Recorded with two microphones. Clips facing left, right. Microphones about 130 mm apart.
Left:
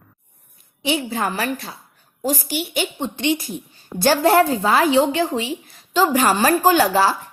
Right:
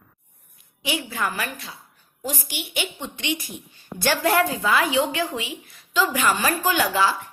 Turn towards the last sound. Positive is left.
turn(degrees=35)  # may be behind; listen again after turning